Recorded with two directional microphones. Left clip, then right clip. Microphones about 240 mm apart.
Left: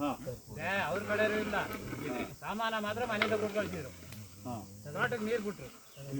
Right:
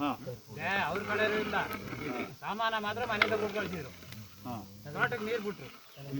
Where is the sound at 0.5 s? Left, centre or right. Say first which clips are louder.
Right 2 dB; right.